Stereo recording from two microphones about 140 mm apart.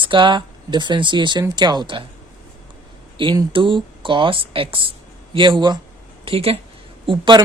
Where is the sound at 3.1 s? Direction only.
35° right (ahead or behind).